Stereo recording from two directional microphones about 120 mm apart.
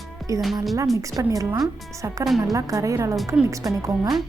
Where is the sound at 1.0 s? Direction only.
30° right (ahead or behind).